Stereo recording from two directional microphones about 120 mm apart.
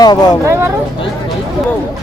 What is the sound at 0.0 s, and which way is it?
Speech, 35° left (ahead or behind).